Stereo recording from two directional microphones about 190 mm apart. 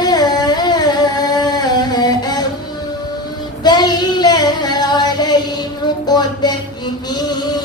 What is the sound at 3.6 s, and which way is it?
Child singing, 20° left (ahead or behind).